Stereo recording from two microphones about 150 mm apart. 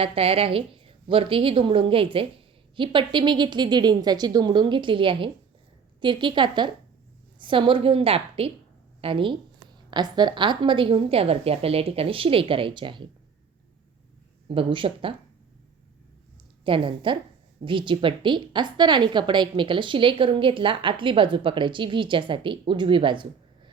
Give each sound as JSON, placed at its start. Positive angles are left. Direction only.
{"t": 0.0, "sound": "a woman's voice", "side_deg": -40}
{"t": 14.4, "sound": "a woman's voice", "side_deg": -35}
{"t": 16.6, "sound": "a woman's voice", "side_deg": -35}